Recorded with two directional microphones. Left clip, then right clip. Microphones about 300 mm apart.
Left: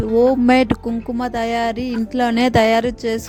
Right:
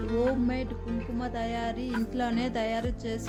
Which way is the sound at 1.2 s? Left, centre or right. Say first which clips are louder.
Left 13 dB; left.